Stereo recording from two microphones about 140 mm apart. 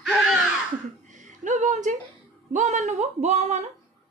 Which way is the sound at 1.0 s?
60° right (ahead or behind).